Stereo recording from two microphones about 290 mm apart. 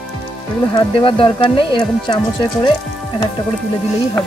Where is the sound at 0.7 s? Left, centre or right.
Centre.